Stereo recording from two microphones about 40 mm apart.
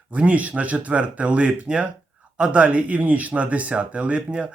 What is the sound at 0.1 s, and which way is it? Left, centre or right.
A man's voice, right.